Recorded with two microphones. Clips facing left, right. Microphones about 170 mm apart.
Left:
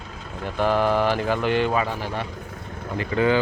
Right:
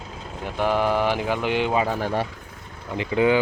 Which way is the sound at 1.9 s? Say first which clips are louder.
Right 4 dB; 45° right (ahead or behind).